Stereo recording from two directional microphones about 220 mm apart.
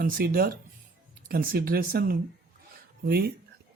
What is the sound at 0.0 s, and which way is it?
Speech, 40° right (ahead or behind).